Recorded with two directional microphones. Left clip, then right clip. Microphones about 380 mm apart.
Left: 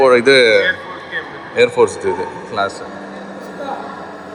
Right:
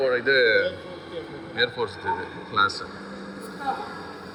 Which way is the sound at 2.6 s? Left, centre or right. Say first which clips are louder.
Left 3 dB; centre.